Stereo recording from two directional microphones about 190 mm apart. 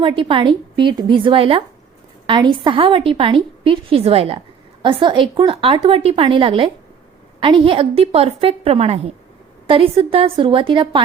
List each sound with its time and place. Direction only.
0.0 s a woman's voice: 25° right (ahead or behind)